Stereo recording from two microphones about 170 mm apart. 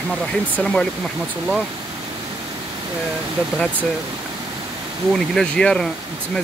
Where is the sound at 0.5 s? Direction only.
5° left (ahead or behind).